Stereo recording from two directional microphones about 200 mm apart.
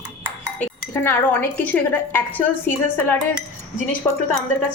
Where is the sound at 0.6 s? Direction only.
10° left (ahead or behind).